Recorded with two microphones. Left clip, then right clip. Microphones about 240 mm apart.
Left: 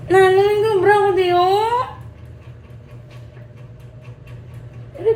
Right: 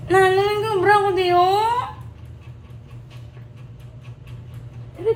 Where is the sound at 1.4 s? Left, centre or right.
Centre.